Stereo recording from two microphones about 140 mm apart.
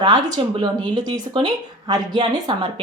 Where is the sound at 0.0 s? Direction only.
30° right (ahead or behind).